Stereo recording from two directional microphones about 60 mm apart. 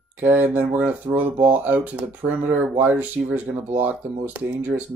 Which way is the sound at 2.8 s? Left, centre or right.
Right.